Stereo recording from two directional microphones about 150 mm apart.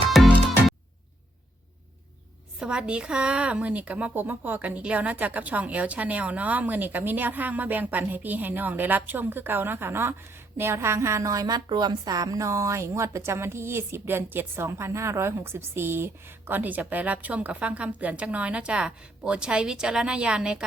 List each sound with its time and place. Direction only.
0.1 s music: centre (ahead or behind)
2.6 s a woman's voice: 5° right (ahead or behind)